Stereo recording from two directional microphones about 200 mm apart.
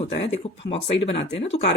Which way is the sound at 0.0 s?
30° left (ahead or behind).